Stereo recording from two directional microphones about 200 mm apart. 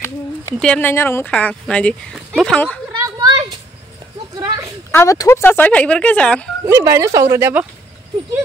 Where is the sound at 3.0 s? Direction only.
20° right (ahead or behind).